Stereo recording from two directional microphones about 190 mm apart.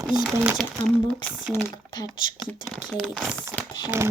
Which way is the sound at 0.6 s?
Centre (ahead or behind).